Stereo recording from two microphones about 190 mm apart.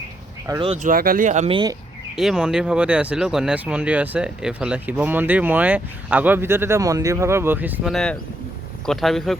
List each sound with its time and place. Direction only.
0.6 s speech: 35° right (ahead or behind)
2.1 s speech: 5° right (ahead or behind)
7.9 s speech: 5° left (ahead or behind)